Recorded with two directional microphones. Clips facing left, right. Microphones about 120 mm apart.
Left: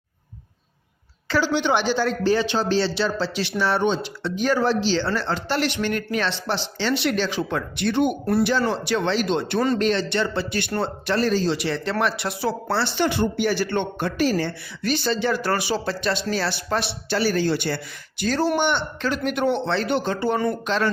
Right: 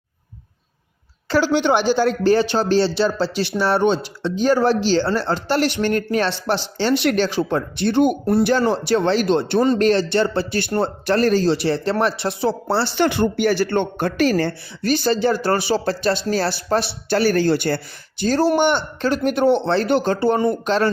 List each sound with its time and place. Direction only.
1.3 s speech: 45° right (ahead or behind); by 4.6 s 30° right (ahead or behind)
4.6 s speech: 45° right (ahead or behind)
5.0 s speech: 35° right (ahead or behind); by 7.3 s 50° right (ahead or behind)
7.3 s speech: 35° right (ahead or behind)
8.4 s speech: 40° right (ahead or behind)
11.5 s speech: 35° right (ahead or behind)
13.0 s speech: 60° right (ahead or behind)
14.2 s speech: 65° right (ahead or behind)
14.4 s speech: 45° right (ahead or behind)
18.2 s speech: 35° right (ahead or behind)